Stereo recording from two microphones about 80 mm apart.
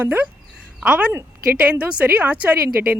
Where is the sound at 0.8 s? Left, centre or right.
Centre.